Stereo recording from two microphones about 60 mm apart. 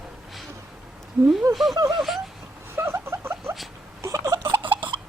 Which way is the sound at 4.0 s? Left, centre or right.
Right.